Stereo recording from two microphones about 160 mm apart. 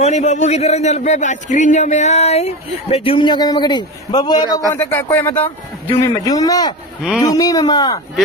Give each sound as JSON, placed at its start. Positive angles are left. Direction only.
{"t": 0.0, "sound": "a man's voice", "side_deg": 45}
{"t": 4.7, "sound": "speech", "side_deg": 15}